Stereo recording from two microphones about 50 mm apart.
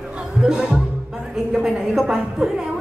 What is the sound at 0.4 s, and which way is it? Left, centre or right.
Speech, centre.